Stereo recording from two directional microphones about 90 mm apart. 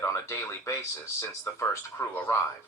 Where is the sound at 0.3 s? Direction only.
30° left (ahead or behind).